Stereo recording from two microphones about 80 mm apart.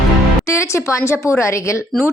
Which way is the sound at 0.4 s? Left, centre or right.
Left.